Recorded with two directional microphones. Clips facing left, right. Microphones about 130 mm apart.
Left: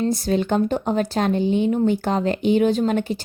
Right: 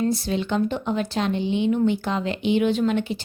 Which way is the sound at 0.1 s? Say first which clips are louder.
Left 4 dB; 45° left (ahead or behind).